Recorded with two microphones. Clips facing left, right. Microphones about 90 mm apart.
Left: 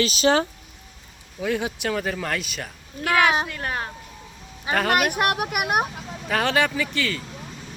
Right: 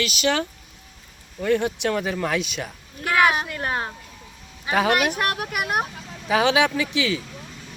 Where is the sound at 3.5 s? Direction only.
25° right (ahead or behind).